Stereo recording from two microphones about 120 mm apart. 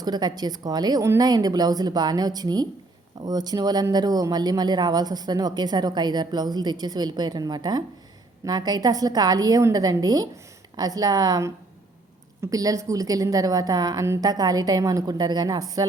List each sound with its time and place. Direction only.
0.0 s speech: 35° right (ahead or behind)